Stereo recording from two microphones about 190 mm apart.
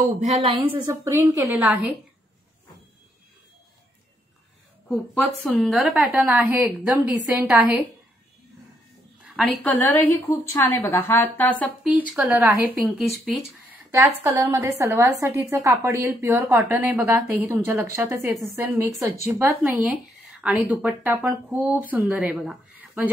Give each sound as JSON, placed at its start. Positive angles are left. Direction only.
{"t": 0.1, "sound": "speech", "side_deg": -35}
{"t": 4.8, "sound": "a woman's voice", "side_deg": 0}
{"t": 9.2, "sound": "a woman's voice", "side_deg": 0}
{"t": 12.1, "sound": "a woman's voice", "side_deg": -5}
{"t": 14.2, "sound": "speech", "side_deg": -15}